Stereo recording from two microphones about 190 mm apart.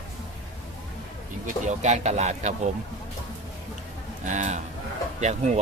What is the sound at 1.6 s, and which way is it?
Speech, 40° right (ahead or behind).